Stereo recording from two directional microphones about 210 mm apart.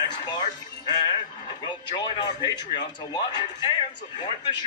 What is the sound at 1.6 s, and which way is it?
A man's voice, 20° left (ahead or behind).